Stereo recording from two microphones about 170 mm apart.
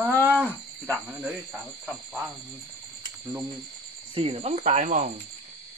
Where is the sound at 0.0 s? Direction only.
5° left (ahead or behind).